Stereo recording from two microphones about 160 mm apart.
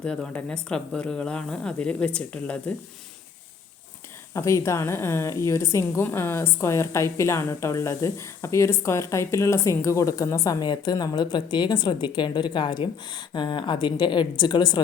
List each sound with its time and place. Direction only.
0.0 s speech: 5° left (ahead or behind)
4.4 s a woman's voice: 20° left (ahead or behind)